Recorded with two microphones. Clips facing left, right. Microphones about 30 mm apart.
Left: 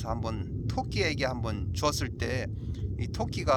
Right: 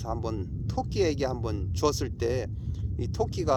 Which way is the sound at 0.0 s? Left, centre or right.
Left.